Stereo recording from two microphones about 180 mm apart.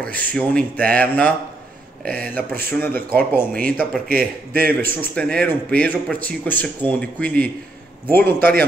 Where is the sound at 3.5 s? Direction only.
50° right (ahead or behind).